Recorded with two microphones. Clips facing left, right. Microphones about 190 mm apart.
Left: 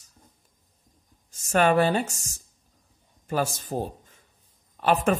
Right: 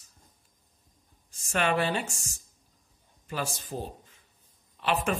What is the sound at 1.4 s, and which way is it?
Speech, 40° left (ahead or behind).